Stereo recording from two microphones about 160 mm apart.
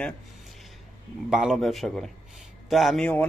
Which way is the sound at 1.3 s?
Centre (ahead or behind).